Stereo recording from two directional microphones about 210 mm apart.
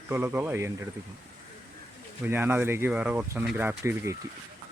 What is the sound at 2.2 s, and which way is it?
Speech, 10° right (ahead or behind).